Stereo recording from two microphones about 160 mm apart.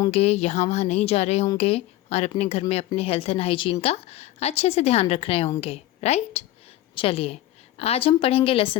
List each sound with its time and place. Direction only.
0.1 s speech: 40° left (ahead or behind)